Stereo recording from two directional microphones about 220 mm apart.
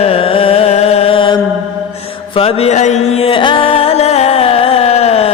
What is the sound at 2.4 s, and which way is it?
Music, 25° left (ahead or behind).